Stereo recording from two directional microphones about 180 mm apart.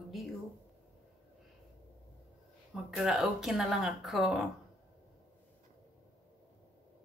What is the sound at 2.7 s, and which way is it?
Speech, centre (ahead or behind).